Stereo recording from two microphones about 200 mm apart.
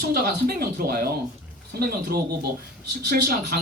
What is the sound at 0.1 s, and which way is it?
A man's voice, 45° right (ahead or behind).